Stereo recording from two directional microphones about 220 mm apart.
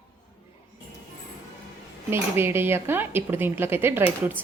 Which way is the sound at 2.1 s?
10° right (ahead or behind).